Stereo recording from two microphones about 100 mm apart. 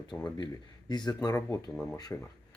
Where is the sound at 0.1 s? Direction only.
35° left (ahead or behind).